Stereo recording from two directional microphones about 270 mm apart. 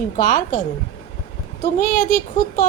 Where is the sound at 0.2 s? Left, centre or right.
Left.